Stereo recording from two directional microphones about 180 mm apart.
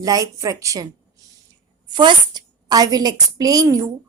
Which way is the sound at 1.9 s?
25° right (ahead or behind).